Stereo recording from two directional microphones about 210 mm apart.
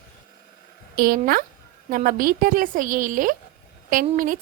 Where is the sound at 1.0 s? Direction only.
45° right (ahead or behind).